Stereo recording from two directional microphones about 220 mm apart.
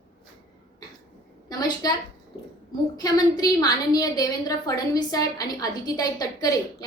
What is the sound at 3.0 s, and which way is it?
A woman's voice, 15° left (ahead or behind).